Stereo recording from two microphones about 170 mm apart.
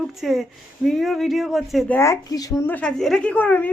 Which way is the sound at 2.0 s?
20° left (ahead or behind).